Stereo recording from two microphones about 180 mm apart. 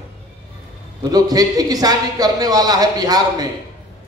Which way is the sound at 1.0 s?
20° right (ahead or behind).